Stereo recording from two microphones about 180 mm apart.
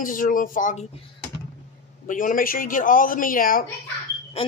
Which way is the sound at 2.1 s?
50° left (ahead or behind).